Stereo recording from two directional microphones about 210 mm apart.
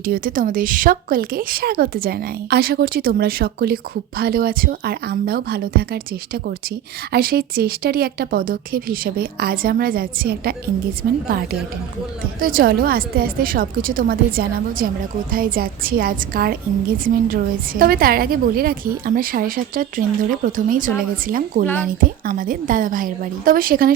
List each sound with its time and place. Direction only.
0.0 s a woman's voice: 45° right (ahead or behind)